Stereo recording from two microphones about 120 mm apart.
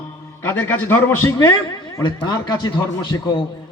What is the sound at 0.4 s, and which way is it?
Speech, 15° left (ahead or behind).